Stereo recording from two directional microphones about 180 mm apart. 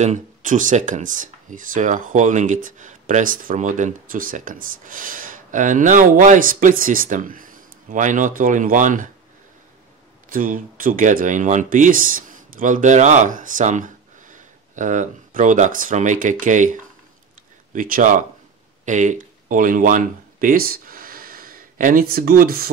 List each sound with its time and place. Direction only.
0.0 s speech: 45° right (ahead or behind)
10.3 s speech: 50° right (ahead or behind)